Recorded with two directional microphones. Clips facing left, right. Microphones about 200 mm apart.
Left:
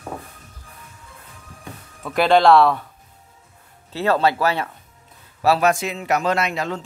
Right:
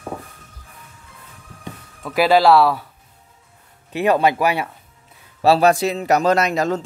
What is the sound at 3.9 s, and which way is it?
Speech, 15° right (ahead or behind).